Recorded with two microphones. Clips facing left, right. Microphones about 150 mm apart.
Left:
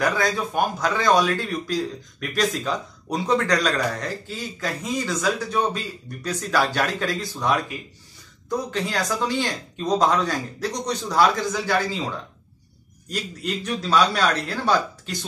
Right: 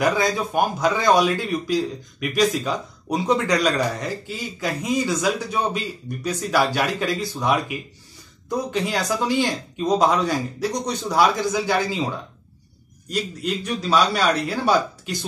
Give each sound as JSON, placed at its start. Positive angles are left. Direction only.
{"t": 0.0, "sound": "speech", "side_deg": -15}
{"t": 13.1, "sound": "a man's voice", "side_deg": 0}